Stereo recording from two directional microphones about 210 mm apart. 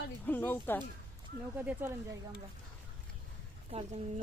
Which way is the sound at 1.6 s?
5° right (ahead or behind).